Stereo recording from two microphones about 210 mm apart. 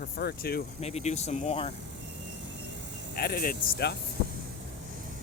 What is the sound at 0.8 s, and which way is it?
Speech, 30° left (ahead or behind).